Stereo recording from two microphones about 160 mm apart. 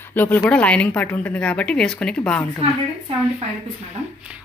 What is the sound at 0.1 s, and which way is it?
Speech, 10° left (ahead or behind).